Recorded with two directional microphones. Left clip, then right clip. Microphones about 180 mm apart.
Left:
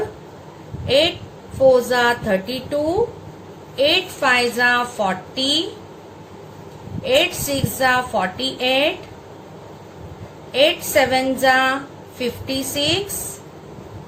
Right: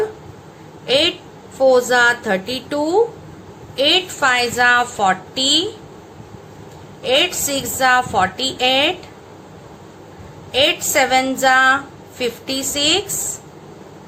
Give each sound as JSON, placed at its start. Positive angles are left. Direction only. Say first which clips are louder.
{"t": 0.9, "sound": "a woman's voice", "louder": "right 1 dB", "side_deg": -55}
{"t": 3.8, "sound": "a woman's voice", "louder": "right 2 dB", "side_deg": -60}
{"t": 7.0, "sound": "a woman's voice", "louder": "right 1 dB", "side_deg": -60}
{"t": 10.5, "sound": "a woman's voice", "louder": "even", "side_deg": -60}